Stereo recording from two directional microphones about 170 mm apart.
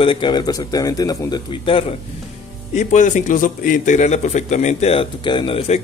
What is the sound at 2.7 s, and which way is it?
A man's voice, 45° left (ahead or behind).